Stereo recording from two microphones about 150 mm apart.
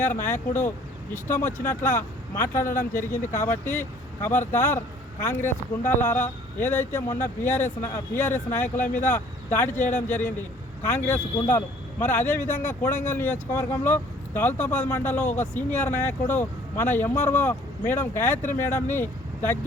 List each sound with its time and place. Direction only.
0.0 s speech: 15° left (ahead or behind)